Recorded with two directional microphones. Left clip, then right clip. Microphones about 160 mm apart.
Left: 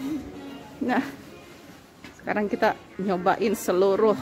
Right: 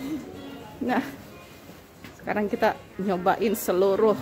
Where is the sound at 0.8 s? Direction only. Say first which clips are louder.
Left 1 dB; 15° left (ahead or behind).